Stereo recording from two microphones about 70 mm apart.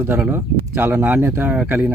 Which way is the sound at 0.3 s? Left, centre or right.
Right.